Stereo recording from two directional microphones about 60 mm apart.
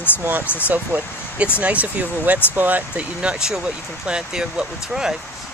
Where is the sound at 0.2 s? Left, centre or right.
Right.